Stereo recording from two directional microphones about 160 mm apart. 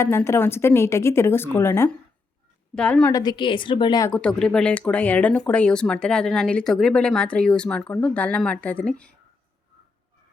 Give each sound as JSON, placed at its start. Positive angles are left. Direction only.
{"t": 0.0, "sound": "a woman's voice", "side_deg": 15}
{"t": 3.1, "sound": "a woman's voice", "side_deg": 25}
{"t": 4.1, "sound": "speech", "side_deg": 5}